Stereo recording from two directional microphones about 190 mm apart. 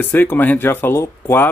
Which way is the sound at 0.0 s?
10° left (ahead or behind).